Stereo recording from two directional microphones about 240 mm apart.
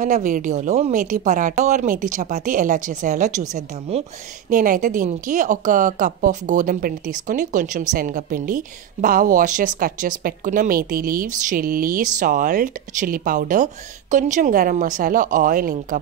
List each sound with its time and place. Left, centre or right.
0.0 s a woman's voice: right